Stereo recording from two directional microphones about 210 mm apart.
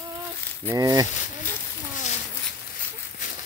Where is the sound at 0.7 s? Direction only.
15° right (ahead or behind).